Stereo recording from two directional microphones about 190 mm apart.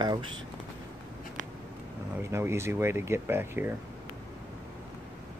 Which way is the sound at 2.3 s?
15° right (ahead or behind).